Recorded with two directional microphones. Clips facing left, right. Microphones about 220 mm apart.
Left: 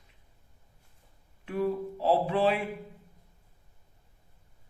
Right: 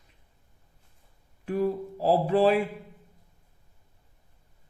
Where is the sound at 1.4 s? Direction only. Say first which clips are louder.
Right 2 dB; 40° right (ahead or behind).